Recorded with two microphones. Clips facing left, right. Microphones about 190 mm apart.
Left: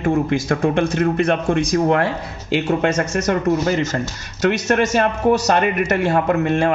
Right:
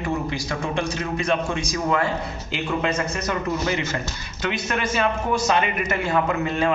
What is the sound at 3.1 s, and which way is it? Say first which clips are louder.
A man's voice: left 8 dB; 45° left (ahead or behind).